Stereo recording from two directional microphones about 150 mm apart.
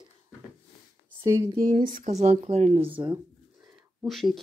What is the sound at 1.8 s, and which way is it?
Speech, 55° right (ahead or behind).